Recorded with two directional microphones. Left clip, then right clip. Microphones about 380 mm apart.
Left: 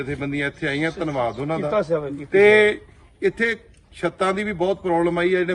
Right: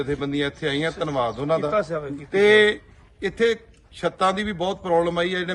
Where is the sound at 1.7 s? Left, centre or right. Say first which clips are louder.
Left 2 dB; centre.